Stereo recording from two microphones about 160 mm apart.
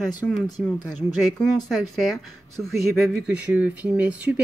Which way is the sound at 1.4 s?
5° left (ahead or behind).